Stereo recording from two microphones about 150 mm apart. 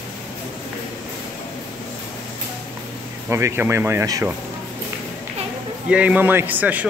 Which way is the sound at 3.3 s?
15° right (ahead or behind).